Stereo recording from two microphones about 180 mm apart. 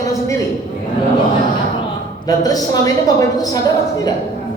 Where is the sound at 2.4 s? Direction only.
20° left (ahead or behind).